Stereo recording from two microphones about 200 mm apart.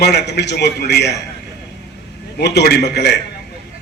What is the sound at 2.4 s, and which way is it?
Speech, 55° left (ahead or behind).